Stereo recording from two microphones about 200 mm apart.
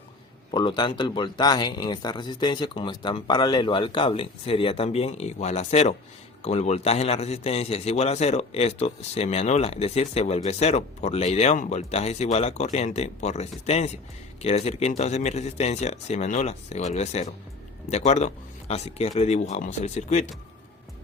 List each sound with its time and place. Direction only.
0.5 s a man's voice: 20° left (ahead or behind)